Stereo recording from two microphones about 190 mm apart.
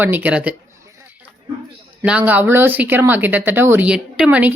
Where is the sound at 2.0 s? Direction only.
10° right (ahead or behind).